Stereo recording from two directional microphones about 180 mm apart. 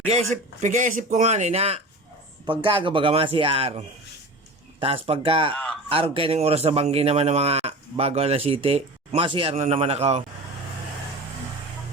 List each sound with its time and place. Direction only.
0.1 s a man's voice: 40° right (ahead or behind)
5.0 s a man's voice: 30° right (ahead or behind)
5.5 s a man's voice: 5° left (ahead or behind)
5.9 s a man's voice: 30° right (ahead or behind)